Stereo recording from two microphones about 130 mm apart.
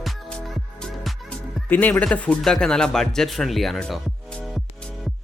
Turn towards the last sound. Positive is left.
turn(degrees=5)  # may be behind; listen again after turning